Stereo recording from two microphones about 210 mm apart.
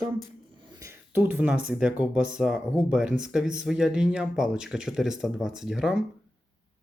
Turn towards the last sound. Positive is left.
turn(degrees=0)  # may be behind; listen again after turning